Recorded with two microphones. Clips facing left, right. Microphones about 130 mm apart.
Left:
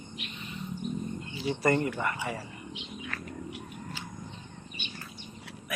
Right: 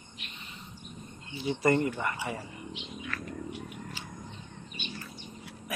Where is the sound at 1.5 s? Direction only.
25° right (ahead or behind).